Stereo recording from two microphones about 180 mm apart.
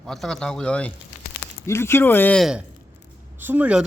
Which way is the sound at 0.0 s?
Centre (ahead or behind).